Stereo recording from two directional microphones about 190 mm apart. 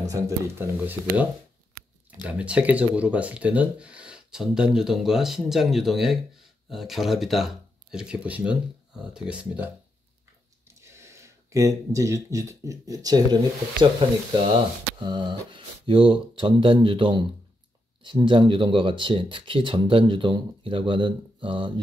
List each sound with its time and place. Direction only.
0.0 s speech: 15° right (ahead or behind)
2.2 s speech: 5° right (ahead or behind)
10.7 s speech: 15° right (ahead or behind)
15.0 s speech: 25° right (ahead or behind)